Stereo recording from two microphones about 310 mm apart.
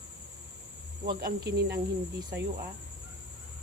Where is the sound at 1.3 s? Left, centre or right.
Right.